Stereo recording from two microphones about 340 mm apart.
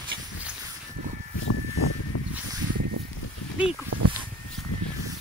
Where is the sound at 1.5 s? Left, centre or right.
Left.